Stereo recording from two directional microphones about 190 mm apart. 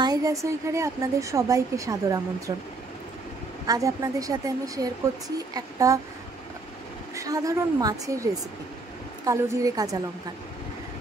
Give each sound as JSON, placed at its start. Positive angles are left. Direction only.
{"t": 0.0, "sound": "a woman's voice", "side_deg": -20}
{"t": 3.6, "sound": "a woman's voice", "side_deg": -20}
{"t": 7.2, "sound": "a woman's voice", "side_deg": -20}